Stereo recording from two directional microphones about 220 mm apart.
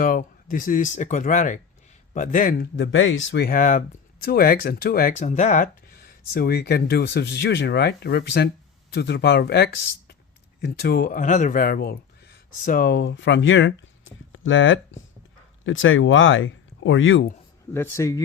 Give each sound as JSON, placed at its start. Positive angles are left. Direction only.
{"t": 0.0, "sound": "speech", "side_deg": 40}
{"t": 17.7, "sound": "speech", "side_deg": 10}